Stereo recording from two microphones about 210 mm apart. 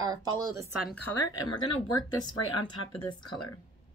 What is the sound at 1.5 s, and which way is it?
Speech, 20° left (ahead or behind).